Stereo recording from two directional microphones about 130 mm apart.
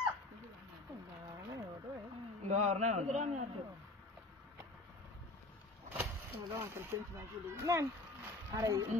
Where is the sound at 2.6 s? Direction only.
60° right (ahead or behind).